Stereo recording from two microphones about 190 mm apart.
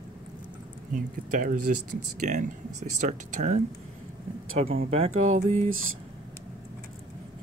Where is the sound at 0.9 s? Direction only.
45° right (ahead or behind).